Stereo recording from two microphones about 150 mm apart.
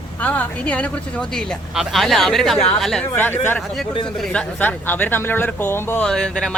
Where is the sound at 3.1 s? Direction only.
15° left (ahead or behind).